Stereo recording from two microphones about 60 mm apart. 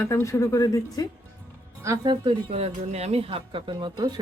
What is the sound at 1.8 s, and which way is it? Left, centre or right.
Speech, right.